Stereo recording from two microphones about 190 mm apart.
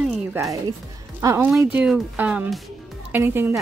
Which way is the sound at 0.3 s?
15° right (ahead or behind).